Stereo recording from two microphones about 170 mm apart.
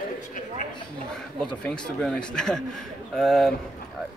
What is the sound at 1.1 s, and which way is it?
Speech, 5° left (ahead or behind).